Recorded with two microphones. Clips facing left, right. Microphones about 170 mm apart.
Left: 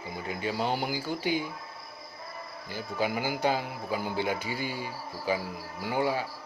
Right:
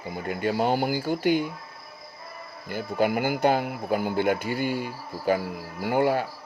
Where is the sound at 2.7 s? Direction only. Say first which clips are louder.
Right 6 dB; 55° right (ahead or behind).